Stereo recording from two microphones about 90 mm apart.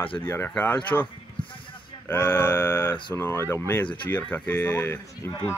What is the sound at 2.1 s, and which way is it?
Speech, 25° left (ahead or behind).